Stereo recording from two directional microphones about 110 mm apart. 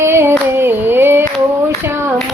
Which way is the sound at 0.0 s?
20° right (ahead or behind).